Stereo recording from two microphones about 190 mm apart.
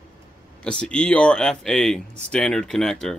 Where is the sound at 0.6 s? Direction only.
5° left (ahead or behind).